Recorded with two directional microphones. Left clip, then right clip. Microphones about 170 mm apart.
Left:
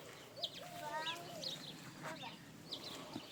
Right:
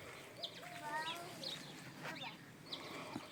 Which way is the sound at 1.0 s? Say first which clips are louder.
Left 1 dB; 80° left.